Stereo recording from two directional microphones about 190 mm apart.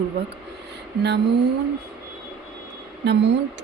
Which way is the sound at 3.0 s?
65° right (ahead or behind).